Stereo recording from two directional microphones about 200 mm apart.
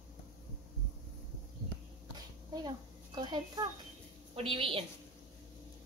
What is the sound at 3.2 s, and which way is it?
A woman's voice, 20° right (ahead or behind).